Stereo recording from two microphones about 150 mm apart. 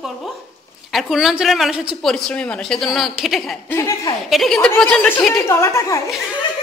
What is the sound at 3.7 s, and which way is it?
Speech, 20° left (ahead or behind).